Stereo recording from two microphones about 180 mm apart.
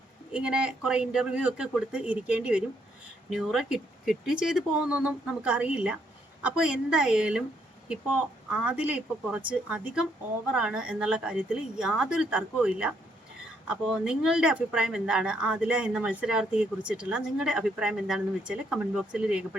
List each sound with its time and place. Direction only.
0.3 s speech: 5° right (ahead or behind)
8.4 s speech: 5° right (ahead or behind)